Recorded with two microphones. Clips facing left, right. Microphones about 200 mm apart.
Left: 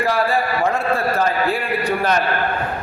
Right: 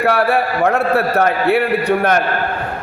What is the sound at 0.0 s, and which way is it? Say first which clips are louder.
A man's voice: right 4 dB; 65° right (ahead or behind).